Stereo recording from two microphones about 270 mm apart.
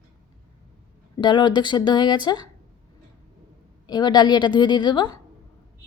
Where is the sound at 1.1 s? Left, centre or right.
Centre.